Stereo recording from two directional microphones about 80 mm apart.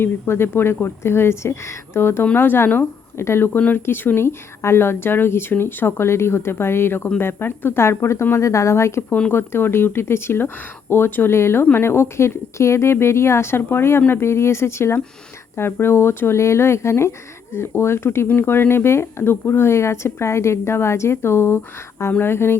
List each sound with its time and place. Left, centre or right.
0.0 s a woman's voice: left
9.0 s speech: centre
9.3 s a woman's voice: left